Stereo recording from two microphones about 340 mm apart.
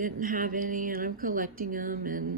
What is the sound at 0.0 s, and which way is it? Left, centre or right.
Speech, right.